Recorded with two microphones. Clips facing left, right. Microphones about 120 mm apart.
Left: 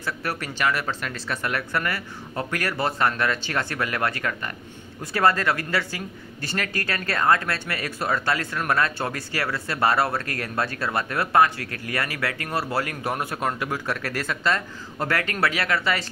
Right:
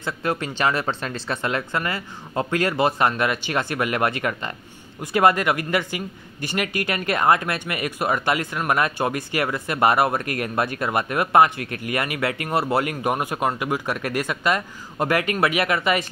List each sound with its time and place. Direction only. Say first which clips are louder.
0.0 s speech: right 4 dB; 20° right (ahead or behind)